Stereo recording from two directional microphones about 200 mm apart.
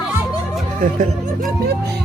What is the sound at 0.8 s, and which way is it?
Speech, 45° right (ahead or behind).